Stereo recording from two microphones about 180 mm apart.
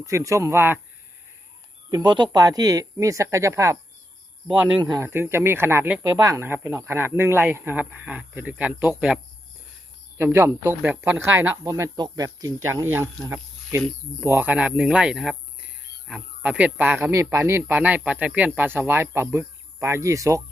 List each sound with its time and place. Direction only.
0.0 s speech: 15° right (ahead or behind)
1.9 s speech: 25° right (ahead or behind)
4.8 s speech: 15° right (ahead or behind)
10.2 s speech: 15° right (ahead or behind)